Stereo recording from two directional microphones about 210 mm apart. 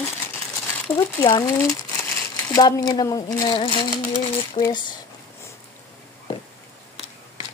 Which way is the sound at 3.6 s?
25° left (ahead or behind).